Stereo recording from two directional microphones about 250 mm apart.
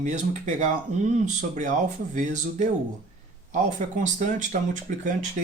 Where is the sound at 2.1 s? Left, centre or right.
Right.